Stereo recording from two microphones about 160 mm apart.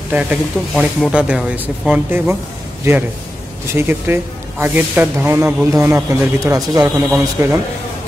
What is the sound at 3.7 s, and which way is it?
Speech, 15° right (ahead or behind).